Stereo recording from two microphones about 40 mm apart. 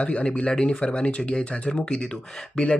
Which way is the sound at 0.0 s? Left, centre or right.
Left.